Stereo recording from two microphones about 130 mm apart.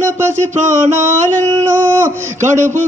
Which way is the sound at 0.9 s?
70° right (ahead or behind).